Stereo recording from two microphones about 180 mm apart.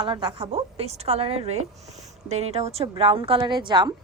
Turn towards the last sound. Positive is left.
turn(degrees=-25)  # may be behind; listen again after turning